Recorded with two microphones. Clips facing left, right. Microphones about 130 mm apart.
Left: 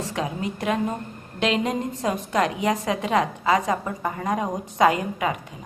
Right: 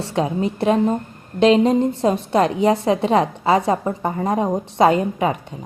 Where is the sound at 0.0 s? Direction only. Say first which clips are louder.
Right 7 dB; 30° right (ahead or behind).